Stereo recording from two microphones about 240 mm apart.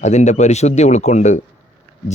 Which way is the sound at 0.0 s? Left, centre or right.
Left.